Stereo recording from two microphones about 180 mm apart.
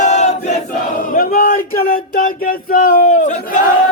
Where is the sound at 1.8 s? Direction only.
50° left (ahead or behind).